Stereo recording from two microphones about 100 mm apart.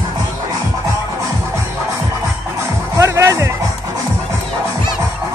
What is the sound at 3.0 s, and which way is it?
Music, 30° right (ahead or behind).